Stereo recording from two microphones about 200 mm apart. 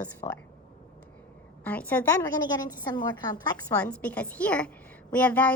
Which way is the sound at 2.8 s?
20° left (ahead or behind).